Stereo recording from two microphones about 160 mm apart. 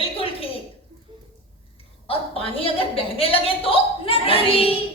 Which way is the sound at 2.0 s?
35° left (ahead or behind).